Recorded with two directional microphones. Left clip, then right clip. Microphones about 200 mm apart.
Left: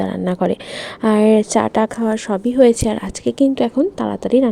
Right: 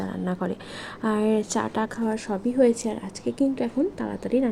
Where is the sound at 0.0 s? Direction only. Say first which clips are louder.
Left 11 dB; 20° left (ahead or behind).